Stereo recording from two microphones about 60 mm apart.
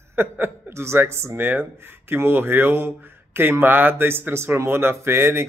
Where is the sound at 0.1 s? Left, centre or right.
Right.